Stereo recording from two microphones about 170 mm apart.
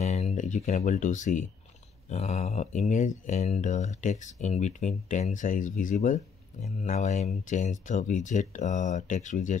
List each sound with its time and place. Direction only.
0.0 s speech: 45° left (ahead or behind)